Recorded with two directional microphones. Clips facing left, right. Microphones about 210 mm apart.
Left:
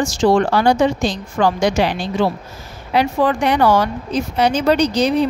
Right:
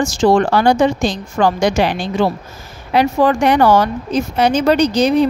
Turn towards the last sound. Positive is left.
turn(degrees=-50)  # may be behind; listen again after turning